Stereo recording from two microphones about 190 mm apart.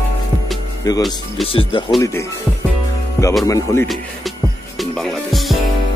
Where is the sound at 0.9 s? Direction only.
20° left (ahead or behind).